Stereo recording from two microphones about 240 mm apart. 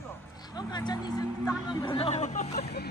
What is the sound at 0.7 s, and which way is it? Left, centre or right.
Speech, centre.